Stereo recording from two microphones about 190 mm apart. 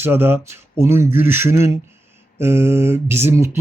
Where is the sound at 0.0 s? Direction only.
10° right (ahead or behind).